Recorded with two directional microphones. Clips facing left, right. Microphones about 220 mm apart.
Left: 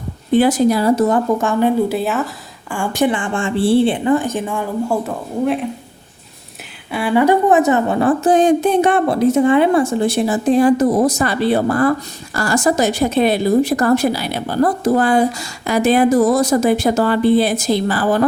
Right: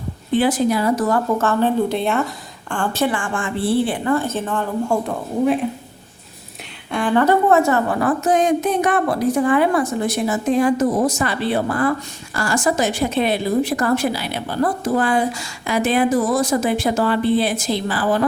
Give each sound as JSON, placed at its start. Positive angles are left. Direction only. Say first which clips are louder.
{"t": 0.3, "sound": "a woman's voice", "louder": "left 4 dB", "side_deg": 40}
{"t": 6.9, "sound": "a woman's voice", "louder": "left 2 dB", "side_deg": 10}